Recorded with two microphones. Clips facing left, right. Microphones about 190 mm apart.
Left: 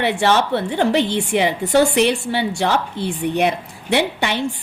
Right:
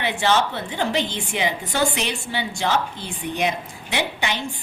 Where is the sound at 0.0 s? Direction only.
65° left (ahead or behind).